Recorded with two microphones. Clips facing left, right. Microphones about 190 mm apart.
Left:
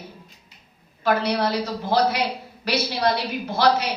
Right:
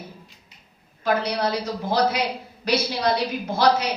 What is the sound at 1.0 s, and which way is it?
A woman's voice, 55° left (ahead or behind).